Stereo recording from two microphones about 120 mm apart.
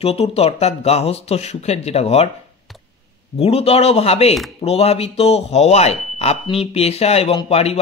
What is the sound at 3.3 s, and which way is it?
Speech, 55° left (ahead or behind).